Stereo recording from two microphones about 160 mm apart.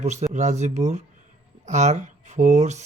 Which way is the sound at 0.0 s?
45° right (ahead or behind).